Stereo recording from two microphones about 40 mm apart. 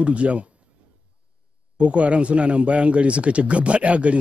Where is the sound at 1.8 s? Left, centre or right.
Right.